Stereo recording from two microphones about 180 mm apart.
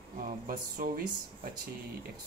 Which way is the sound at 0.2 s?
50° right (ahead or behind).